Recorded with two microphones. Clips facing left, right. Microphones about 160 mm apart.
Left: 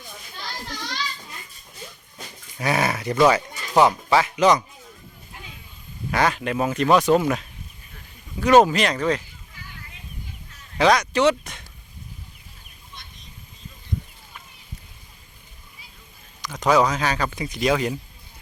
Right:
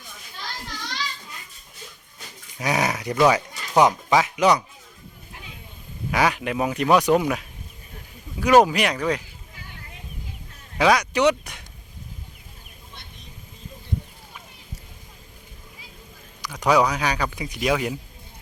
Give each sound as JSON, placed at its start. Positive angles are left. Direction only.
{"t": 2.6, "sound": "speech", "side_deg": -15}
{"t": 6.1, "sound": "speech", "side_deg": -10}
{"t": 10.8, "sound": "speech", "side_deg": -10}
{"t": 16.4, "sound": "speech", "side_deg": -10}